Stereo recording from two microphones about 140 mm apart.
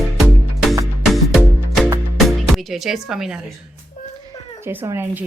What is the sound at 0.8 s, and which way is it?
Music, centre (ahead or behind).